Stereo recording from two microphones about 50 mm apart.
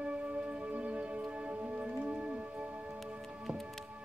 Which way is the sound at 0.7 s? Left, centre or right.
Right.